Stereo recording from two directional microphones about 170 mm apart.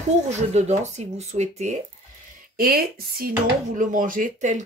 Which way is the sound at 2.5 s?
60° right (ahead or behind).